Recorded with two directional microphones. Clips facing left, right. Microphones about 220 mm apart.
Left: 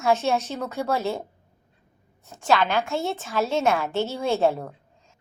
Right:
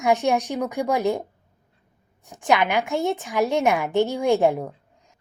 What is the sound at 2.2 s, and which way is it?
A woman's voice, 15° right (ahead or behind).